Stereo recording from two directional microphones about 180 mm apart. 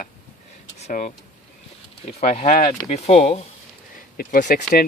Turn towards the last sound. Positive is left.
turn(degrees=50)  # may be behind; listen again after turning